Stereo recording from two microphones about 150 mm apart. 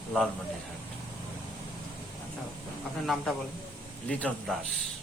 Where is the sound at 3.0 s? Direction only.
Centre (ahead or behind).